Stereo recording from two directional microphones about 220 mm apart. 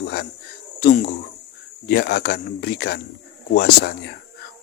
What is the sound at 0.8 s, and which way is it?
Speech, 45° left (ahead or behind).